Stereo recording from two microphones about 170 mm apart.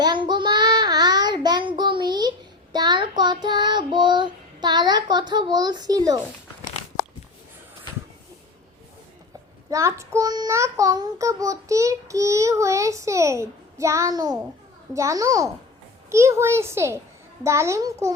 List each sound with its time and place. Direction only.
0.0 s child singing: 25° right (ahead or behind)
9.6 s child singing: 15° right (ahead or behind)
14.9 s a child's voice: 20° right (ahead or behind)
16.0 s child singing: 15° right (ahead or behind)